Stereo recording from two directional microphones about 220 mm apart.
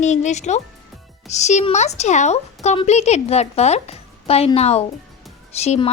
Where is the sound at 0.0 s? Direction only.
30° left (ahead or behind).